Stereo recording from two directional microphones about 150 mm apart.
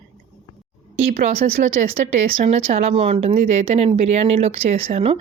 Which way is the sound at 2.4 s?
45° right (ahead or behind).